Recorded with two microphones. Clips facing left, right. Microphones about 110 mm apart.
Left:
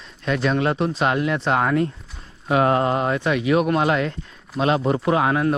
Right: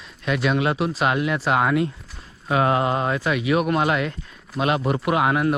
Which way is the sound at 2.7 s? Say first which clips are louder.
Left 1 dB; 20° right (ahead or behind).